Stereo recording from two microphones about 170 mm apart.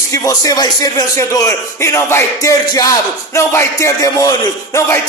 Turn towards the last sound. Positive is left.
turn(degrees=20)  # may be behind; listen again after turning